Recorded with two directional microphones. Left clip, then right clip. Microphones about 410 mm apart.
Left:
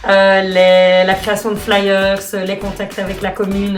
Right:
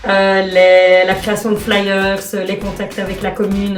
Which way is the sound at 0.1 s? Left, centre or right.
Centre.